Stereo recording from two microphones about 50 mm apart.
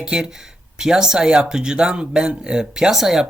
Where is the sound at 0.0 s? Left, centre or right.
Centre.